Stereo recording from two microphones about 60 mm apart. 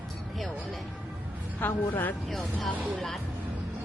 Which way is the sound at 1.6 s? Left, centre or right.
Left.